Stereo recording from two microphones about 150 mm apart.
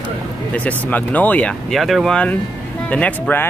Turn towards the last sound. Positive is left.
turn(degrees=10)  # may be behind; listen again after turning